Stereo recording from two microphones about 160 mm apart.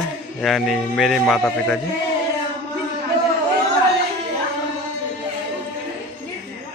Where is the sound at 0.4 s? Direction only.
Centre (ahead or behind).